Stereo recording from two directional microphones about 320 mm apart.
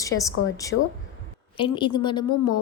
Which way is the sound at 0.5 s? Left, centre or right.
Centre.